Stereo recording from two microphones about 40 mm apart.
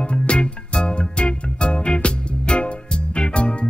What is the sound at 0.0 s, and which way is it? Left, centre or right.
Music, left.